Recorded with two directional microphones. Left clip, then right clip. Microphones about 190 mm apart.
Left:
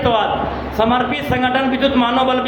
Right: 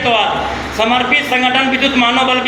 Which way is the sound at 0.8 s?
15° left (ahead or behind).